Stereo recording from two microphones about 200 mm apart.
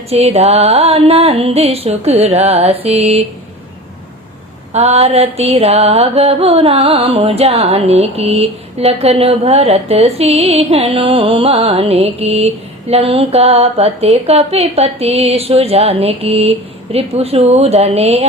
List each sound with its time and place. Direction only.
0.1 s music: 30° right (ahead or behind)
4.7 s music: 30° right (ahead or behind)